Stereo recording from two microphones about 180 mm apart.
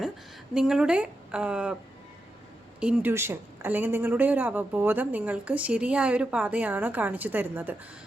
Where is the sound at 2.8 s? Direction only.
5° right (ahead or behind).